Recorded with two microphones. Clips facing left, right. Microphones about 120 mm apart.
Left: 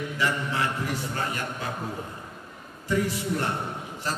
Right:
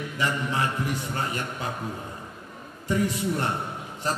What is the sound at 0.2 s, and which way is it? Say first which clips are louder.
Speech: right 1 dB; 15° right (ahead or behind).